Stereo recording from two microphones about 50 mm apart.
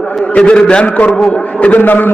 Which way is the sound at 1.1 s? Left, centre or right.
Centre.